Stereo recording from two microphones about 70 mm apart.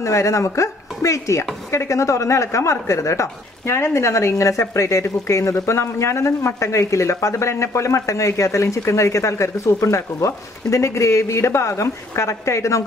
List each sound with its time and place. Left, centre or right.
0.0 s speech: left